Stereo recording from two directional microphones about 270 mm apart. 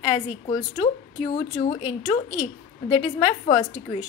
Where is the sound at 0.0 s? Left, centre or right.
Left.